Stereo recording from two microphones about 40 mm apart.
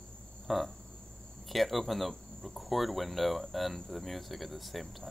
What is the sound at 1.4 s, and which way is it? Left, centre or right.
Speech, centre.